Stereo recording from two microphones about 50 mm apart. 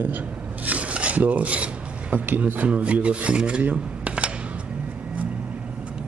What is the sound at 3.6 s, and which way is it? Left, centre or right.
Cutlery, right.